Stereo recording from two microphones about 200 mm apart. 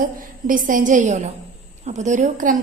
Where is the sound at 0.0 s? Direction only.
40° right (ahead or behind).